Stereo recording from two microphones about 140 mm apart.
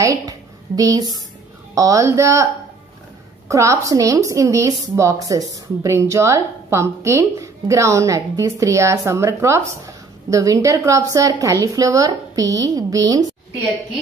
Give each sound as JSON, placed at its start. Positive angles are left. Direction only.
{"t": 0.0, "sound": "a woman's voice", "side_deg": -25}